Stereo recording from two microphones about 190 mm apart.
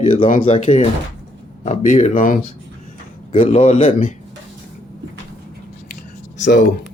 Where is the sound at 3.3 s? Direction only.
30° left (ahead or behind).